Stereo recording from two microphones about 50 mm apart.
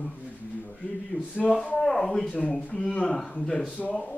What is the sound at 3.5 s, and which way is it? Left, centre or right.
Speech, left.